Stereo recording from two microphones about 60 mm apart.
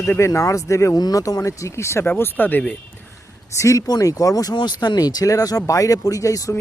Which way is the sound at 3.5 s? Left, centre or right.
Left.